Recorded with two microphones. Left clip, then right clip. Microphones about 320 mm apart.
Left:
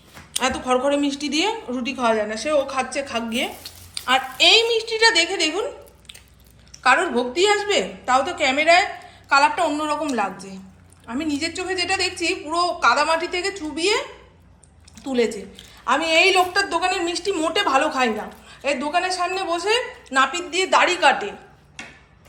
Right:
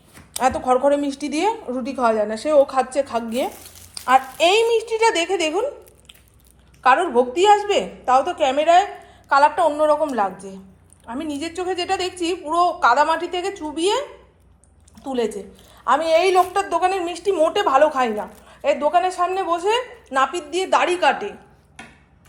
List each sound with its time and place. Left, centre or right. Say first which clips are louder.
0.3 s a woman's voice: right 3 dB; centre
6.8 s a woman's voice: right 2 dB; centre
15.0 s a woman's voice: left 2 dB; centre
21.8 s tick-tock: left 3 dB; right